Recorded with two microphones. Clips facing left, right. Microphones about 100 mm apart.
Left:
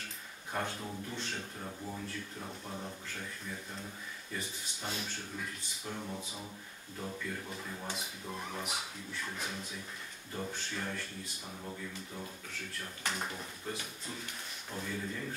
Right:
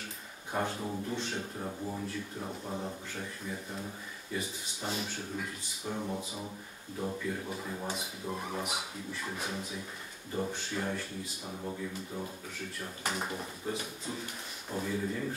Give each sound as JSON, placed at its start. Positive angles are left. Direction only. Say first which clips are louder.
{"t": 0.5, "sound": "speech", "louder": "right 4 dB", "side_deg": -10}
{"t": 1.6, "sound": "speech", "louder": "right 5 dB", "side_deg": -15}
{"t": 5.9, "sound": "speech", "louder": "right 5 dB", "side_deg": -15}
{"t": 8.6, "sound": "speech", "louder": "right 3 dB", "side_deg": -5}